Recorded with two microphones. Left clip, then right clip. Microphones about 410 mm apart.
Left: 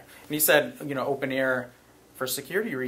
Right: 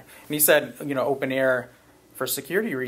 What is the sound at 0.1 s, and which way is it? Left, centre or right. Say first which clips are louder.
Speech: right 2 dB; right.